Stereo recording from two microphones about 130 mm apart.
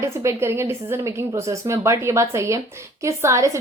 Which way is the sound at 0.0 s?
20° right (ahead or behind).